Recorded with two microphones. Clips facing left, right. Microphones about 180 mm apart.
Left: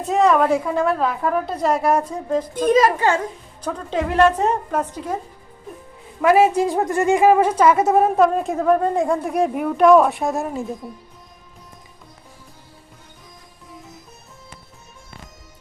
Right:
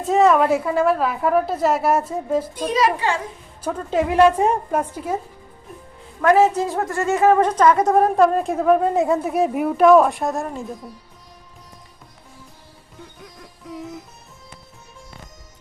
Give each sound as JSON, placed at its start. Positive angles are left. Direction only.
{"t": 0.0, "sound": "a woman's voice", "side_deg": 0}
{"t": 2.6, "sound": "a child's voice", "side_deg": 50}
{"t": 3.6, "sound": "a woman's voice", "side_deg": -5}
{"t": 6.2, "sound": "a woman's voice", "side_deg": 10}